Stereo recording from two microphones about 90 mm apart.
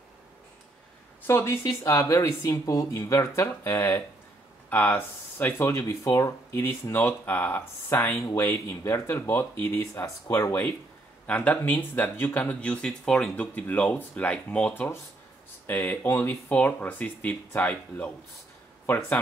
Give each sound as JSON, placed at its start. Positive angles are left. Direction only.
{"t": 1.2, "sound": "speech", "side_deg": 30}
{"t": 4.6, "sound": "speech", "side_deg": 20}
{"t": 11.2, "sound": "speech", "side_deg": 15}